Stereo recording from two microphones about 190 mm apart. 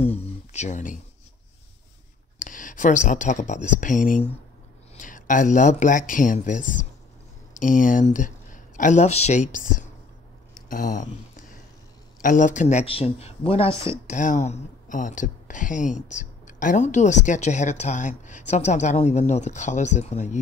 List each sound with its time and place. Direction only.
0.1 s speech: 35° left (ahead or behind)
2.3 s speech: 45° left (ahead or behind)